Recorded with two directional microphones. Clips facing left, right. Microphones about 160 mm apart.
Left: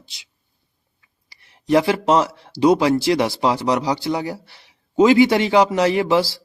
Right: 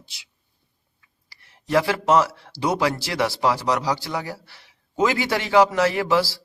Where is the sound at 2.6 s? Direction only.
20° left (ahead or behind).